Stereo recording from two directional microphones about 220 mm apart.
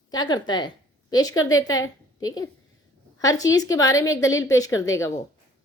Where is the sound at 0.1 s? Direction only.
20° left (ahead or behind).